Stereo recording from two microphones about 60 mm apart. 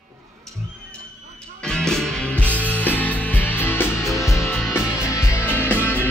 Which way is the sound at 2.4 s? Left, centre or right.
Left.